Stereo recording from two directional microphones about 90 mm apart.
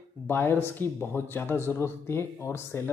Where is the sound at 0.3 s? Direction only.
25° left (ahead or behind).